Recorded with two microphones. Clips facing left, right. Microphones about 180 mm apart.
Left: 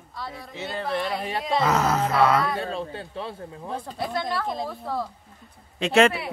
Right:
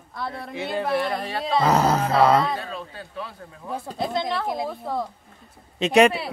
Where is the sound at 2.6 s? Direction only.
25° left (ahead or behind).